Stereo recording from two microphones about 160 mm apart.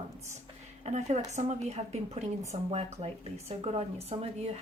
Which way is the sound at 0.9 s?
45° right (ahead or behind).